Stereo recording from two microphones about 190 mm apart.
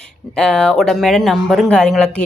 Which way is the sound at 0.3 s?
5° left (ahead or behind).